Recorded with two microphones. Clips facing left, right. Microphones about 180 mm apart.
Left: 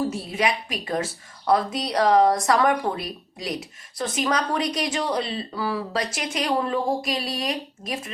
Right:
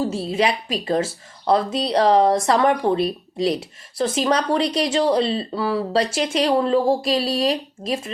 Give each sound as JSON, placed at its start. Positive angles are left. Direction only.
{"t": 0.0, "sound": "speech", "side_deg": -30}